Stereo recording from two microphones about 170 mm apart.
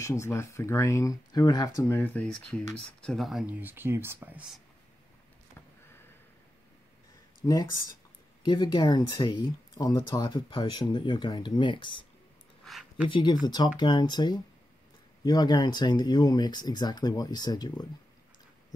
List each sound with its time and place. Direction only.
0.0 s speech: 15° left (ahead or behind); by 4.6 s 10° right (ahead or behind)
7.4 s speech: 20° left (ahead or behind)
12.6 s a sound: 5° right (ahead or behind)
13.1 s speech: 25° left (ahead or behind)